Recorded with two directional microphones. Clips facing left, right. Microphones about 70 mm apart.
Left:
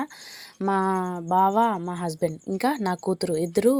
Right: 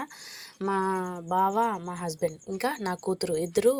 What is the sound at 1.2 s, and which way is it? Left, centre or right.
A woman's voice, left.